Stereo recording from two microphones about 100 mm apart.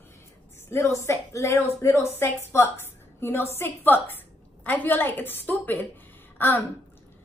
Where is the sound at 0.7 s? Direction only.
30° left (ahead or behind).